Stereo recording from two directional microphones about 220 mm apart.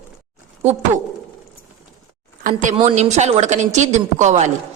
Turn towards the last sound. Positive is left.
turn(degrees=-35)  # may be behind; listen again after turning